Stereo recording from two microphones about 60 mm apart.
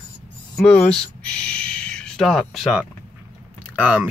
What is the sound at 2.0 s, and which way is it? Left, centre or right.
Speech, centre.